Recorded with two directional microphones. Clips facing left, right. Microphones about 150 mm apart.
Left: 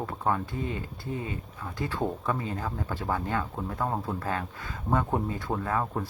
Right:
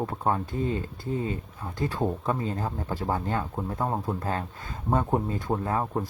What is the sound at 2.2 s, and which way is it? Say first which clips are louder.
Speech: right 2 dB; 30° right (ahead or behind).